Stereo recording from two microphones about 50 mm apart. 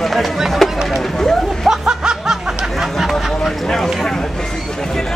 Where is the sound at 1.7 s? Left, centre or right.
Centre.